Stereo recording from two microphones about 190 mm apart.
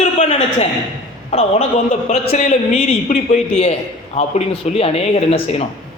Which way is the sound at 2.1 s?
35° left (ahead or behind).